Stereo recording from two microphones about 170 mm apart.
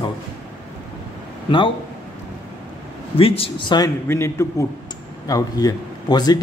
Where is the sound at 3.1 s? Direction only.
35° left (ahead or behind).